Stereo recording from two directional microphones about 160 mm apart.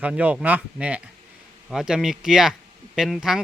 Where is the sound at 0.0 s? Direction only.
10° right (ahead or behind).